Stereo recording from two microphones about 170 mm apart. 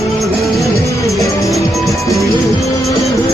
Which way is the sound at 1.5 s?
Centre (ahead or behind).